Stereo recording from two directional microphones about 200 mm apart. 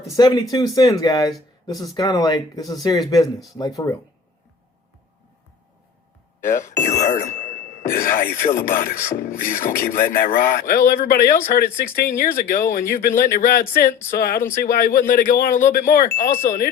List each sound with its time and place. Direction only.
0.0 s speech: 20° left (ahead or behind)
6.4 s speech: 40° left (ahead or behind)
7.8 s speech: 45° left (ahead or behind)